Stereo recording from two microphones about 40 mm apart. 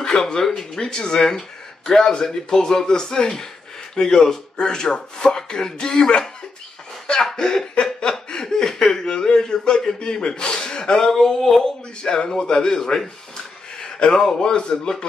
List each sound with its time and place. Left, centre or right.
0.0 s speech: centre
7.3 s speech: centre
7.8 s chuckle: left
12.0 s speech: left
13.7 s a sound: left
14.2 s speech: centre